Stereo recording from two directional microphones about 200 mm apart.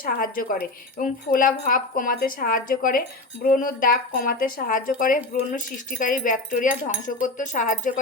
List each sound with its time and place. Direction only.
0.0 s speech: 45° left (ahead or behind)